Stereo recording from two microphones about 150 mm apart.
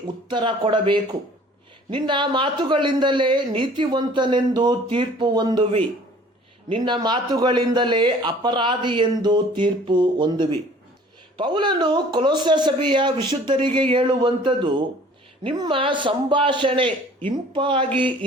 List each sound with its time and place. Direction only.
0.3 s a man's voice: 35° right (ahead or behind)